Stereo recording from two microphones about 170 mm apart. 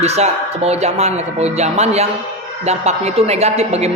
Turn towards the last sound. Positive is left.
turn(degrees=-40)  # may be behind; listen again after turning